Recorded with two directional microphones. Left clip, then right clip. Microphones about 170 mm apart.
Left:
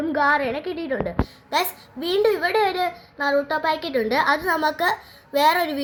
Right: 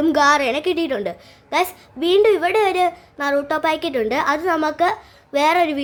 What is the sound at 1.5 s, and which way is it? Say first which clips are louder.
A child's voice: right 5 dB; 20° right (ahead or behind).